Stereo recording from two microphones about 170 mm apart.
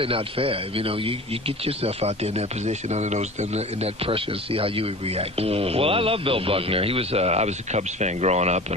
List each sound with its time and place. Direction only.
0.0 s speech: 35° right (ahead or behind)